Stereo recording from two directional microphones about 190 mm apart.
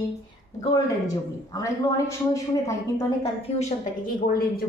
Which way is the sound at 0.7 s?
20° left (ahead or behind).